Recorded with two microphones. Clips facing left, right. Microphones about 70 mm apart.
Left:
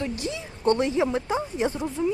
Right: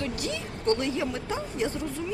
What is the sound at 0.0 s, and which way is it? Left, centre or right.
Speech, left.